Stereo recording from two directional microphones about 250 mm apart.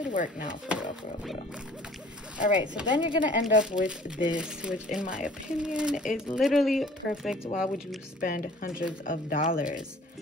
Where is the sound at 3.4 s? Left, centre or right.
Centre.